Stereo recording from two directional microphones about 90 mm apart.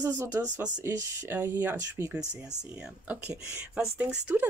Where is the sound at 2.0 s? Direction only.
25° left (ahead or behind).